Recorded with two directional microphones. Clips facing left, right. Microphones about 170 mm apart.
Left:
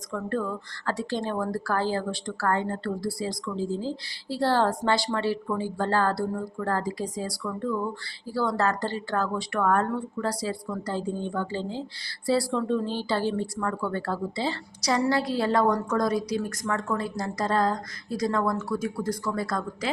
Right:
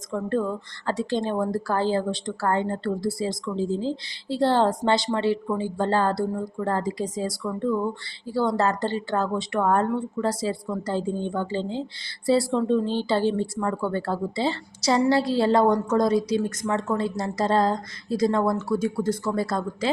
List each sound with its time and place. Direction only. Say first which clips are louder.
0.1 s a woman's voice: right 4 dB; 25° right (ahead or behind)